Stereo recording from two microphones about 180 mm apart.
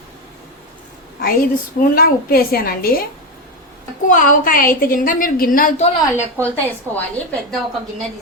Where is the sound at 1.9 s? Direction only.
55° left (ahead or behind).